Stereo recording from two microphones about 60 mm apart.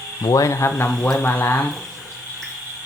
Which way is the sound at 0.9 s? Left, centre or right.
Centre.